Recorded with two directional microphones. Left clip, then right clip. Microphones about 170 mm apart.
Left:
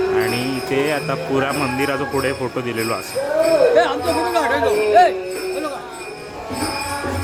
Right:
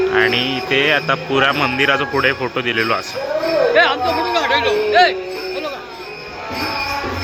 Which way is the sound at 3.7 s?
30° left (ahead or behind).